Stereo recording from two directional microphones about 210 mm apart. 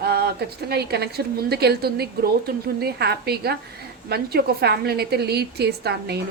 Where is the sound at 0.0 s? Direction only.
50° right (ahead or behind).